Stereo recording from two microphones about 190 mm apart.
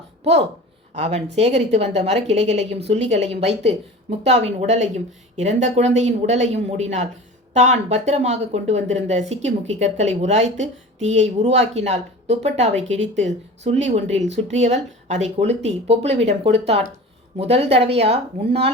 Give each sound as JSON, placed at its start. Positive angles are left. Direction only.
{"t": 0.9, "sound": "speech", "side_deg": -35}